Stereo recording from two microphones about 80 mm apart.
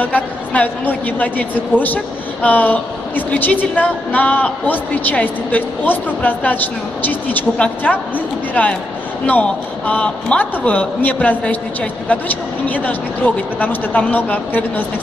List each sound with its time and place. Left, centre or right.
0.0 s a man's voice: centre